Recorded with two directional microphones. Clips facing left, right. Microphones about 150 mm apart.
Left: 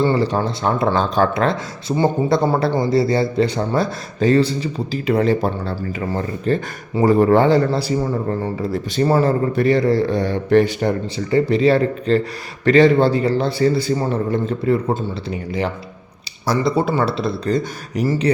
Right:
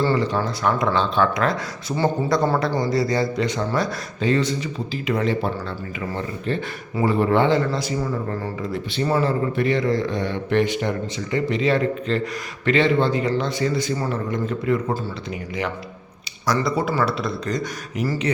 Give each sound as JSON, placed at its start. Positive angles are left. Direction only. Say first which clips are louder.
{"t": 0.1, "sound": "a man's voice", "louder": "left 3 dB", "side_deg": 35}